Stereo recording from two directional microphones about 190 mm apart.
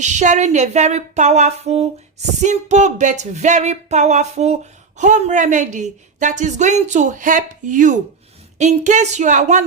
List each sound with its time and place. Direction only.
0.0 s a woman's voice: 40° right (ahead or behind)